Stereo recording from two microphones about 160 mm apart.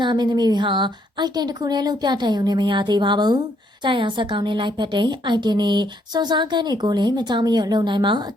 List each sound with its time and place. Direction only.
0.0 s a woman's voice: 30° right (ahead or behind)